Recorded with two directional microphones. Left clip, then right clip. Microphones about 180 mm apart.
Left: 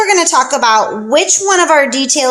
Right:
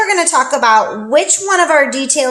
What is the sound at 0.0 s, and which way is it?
Speech, 40° left (ahead or behind).